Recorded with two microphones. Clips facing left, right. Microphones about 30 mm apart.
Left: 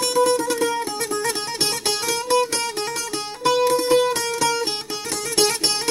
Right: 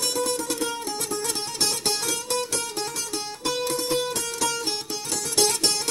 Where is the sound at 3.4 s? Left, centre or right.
Left.